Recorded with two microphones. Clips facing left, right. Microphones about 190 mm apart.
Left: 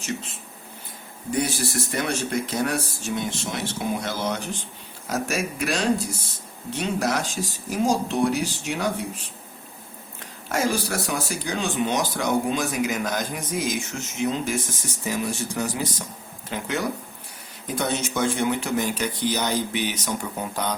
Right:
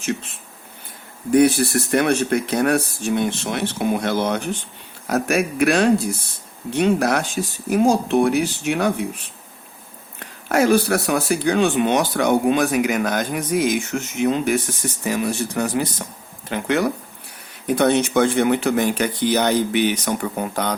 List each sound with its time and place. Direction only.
1.3 s speech: 60° right (ahead or behind)
10.5 s speech: 60° right (ahead or behind)